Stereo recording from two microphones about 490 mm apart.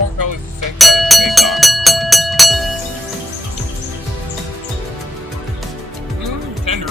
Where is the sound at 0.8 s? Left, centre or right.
Centre.